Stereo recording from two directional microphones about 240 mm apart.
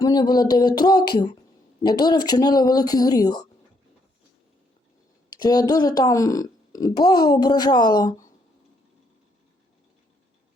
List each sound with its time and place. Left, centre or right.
0.0 s speech: centre
5.3 s speech: centre